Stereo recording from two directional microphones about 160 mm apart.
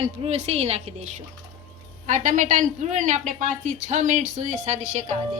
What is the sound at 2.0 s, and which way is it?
A woman's voice, 50° right (ahead or behind).